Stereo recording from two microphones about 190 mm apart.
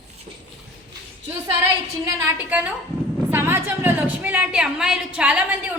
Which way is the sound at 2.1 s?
10° right (ahead or behind).